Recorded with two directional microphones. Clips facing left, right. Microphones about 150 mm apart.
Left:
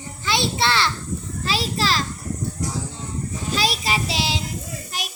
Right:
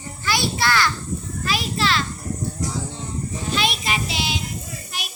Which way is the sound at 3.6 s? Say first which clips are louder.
Left 2 dB; 35° left (ahead or behind).